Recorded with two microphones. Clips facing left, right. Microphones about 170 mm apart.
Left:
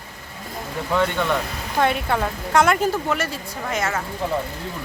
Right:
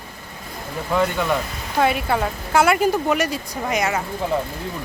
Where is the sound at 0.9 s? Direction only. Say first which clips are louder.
Right 1 dB; 5° right (ahead or behind).